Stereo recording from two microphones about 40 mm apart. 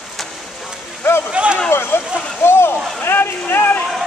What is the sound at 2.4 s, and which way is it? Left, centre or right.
Vehicle, left.